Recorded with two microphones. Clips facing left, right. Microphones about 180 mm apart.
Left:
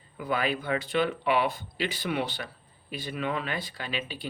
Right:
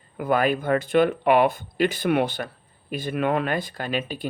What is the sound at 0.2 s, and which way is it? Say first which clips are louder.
Speech: right 7 dB; 50° right (ahead or behind).